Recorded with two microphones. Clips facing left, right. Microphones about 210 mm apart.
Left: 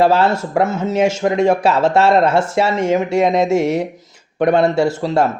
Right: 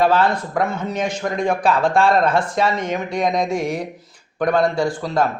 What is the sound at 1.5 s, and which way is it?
Speech, 25° left (ahead or behind).